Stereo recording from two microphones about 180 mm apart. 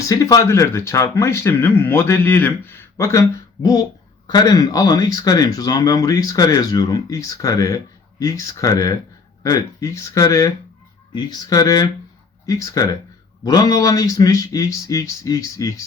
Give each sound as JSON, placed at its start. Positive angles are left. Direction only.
{"t": 0.0, "sound": "speech", "side_deg": 20}